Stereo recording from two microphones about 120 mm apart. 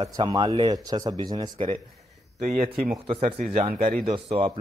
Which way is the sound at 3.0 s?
45° right (ahead or behind).